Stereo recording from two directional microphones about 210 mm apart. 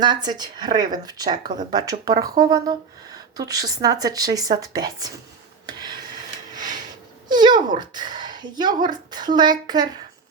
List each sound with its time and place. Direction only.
0.0 s a woman's voice: 20° right (ahead or behind)
5.6 s rub: 20° right (ahead or behind)
6.5 s a sound: 20° right (ahead or behind)
7.3 s speech: 20° right (ahead or behind)